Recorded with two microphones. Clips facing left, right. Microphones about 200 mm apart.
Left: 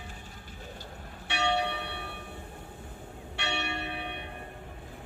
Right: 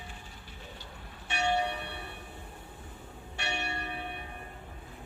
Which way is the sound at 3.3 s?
75° left (ahead or behind).